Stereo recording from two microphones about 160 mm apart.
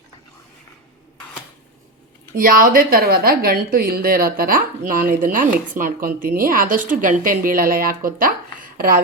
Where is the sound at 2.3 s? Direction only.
60° right (ahead or behind).